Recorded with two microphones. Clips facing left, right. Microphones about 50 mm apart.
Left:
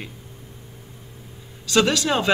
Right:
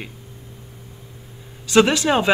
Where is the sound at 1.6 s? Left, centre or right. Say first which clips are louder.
Right 4 dB; right.